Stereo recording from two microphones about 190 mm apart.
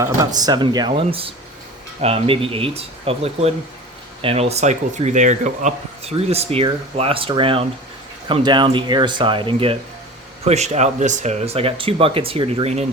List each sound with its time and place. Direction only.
0.0 s speech: 20° right (ahead or behind)